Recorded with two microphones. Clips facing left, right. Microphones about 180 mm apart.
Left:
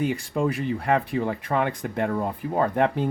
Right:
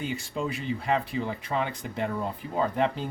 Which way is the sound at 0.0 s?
55° left (ahead or behind).